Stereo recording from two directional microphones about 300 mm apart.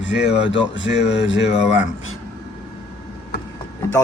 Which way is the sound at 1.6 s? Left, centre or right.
Centre.